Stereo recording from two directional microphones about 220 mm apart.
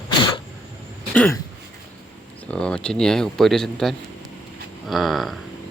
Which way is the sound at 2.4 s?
5° left (ahead or behind).